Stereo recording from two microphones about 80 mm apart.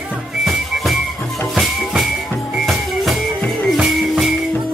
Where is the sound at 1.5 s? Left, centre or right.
Centre.